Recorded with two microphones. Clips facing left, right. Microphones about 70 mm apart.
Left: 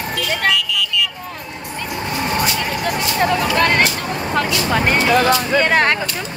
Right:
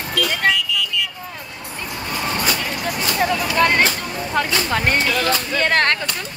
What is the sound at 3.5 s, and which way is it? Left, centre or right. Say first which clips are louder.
Speech: right 1 dB; centre.